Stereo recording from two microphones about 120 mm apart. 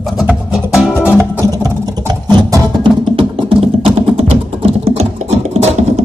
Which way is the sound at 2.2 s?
35° right (ahead or behind).